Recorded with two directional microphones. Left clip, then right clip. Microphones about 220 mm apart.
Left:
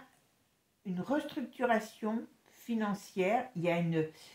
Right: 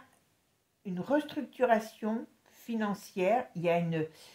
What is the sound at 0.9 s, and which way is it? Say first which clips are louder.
Speech: right 4 dB; 40° right (ahead or behind).